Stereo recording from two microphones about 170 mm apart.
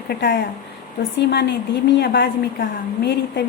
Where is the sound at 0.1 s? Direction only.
70° left (ahead or behind).